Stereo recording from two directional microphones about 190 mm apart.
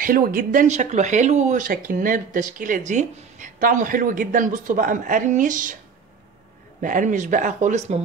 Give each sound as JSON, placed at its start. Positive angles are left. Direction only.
{"t": 0.0, "sound": "speech", "side_deg": -50}
{"t": 6.8, "sound": "speech", "side_deg": -45}